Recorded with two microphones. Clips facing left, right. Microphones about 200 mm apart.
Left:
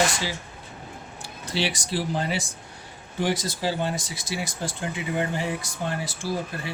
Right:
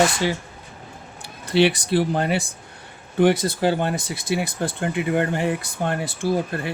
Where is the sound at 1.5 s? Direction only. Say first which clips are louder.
Right 10 dB; 60° right (ahead or behind).